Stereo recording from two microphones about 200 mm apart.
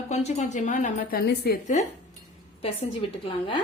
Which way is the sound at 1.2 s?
55° left (ahead or behind).